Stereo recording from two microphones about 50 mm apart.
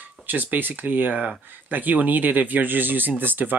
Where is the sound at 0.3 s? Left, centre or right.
Right.